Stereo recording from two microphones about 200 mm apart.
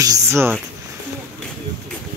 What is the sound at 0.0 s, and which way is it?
Speech, 15° right (ahead or behind).